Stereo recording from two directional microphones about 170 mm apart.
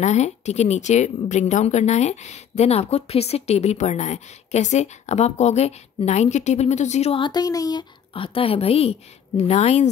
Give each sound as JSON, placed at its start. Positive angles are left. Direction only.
{"t": 0.0, "sound": "a woman's voice", "side_deg": 40}